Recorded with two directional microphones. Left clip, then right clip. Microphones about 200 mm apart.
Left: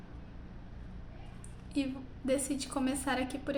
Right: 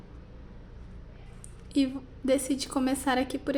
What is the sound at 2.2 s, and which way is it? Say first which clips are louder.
A woman's voice: right 6 dB; 45° right (ahead or behind).